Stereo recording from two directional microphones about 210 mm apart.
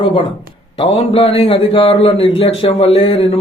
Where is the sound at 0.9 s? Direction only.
25° left (ahead or behind).